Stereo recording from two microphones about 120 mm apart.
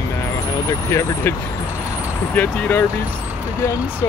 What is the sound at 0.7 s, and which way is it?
Speech, 25° left (ahead or behind).